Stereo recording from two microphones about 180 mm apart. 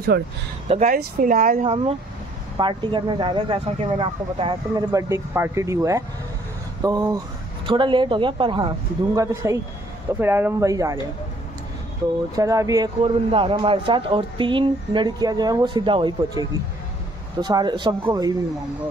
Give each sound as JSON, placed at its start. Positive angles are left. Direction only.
{"t": 0.1, "sound": "speech", "side_deg": -65}
{"t": 0.7, "sound": "speech", "side_deg": -40}
{"t": 0.9, "sound": "speech", "side_deg": -50}
{"t": 2.5, "sound": "a man's voice", "side_deg": -25}
{"t": 12.4, "sound": "a man's voice", "side_deg": -20}